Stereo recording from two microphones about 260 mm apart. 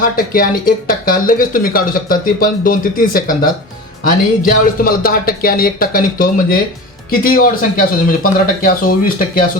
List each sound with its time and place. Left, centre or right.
0.0 s speech: left